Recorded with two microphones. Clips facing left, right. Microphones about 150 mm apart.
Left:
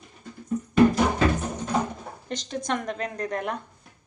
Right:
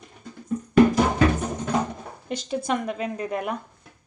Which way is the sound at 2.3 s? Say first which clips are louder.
Right 3 dB; 10° right (ahead or behind).